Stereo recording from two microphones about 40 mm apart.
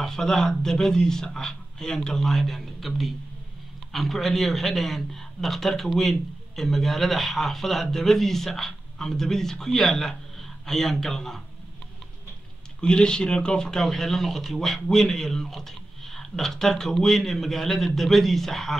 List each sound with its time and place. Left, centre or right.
0.0 s a man's voice: centre
12.8 s speech: left
13.8 s a man's voice: centre